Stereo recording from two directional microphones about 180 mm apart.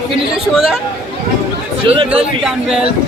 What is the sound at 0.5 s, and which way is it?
Speech, centre (ahead or behind).